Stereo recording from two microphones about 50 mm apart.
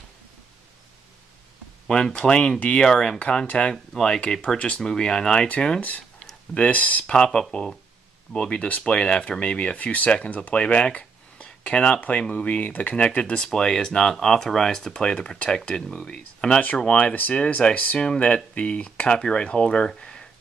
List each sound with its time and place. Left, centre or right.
1.9 s speech: centre
5.8 s speech: left
7.1 s speech: centre; by 8.8 s left
8.8 s speech: centre
17.1 s speech: left
17.4 s speech: left